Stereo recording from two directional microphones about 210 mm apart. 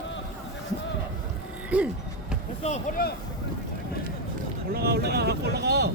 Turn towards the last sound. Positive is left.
turn(degrees=-50)  # may be behind; listen again after turning